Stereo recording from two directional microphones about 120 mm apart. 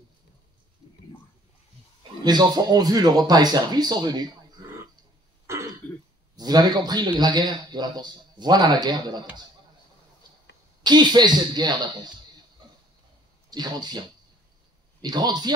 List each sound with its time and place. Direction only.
2.2 s speech: 35° right (ahead or behind)
5.5 s throat clearing: 25° right (ahead or behind)
5.8 s throat clearing: 15° left (ahead or behind)
6.3 s speech: 35° right (ahead or behind)
10.8 s speech: 35° right (ahead or behind)
13.5 s speech: 35° right (ahead or behind)